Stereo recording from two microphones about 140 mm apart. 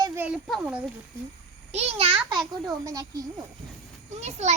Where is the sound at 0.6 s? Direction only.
10° right (ahead or behind).